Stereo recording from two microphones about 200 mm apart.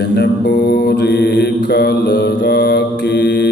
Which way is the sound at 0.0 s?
55° left (ahead or behind).